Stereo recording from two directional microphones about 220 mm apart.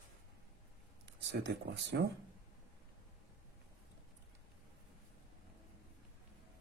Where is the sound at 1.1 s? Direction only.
55° right (ahead or behind).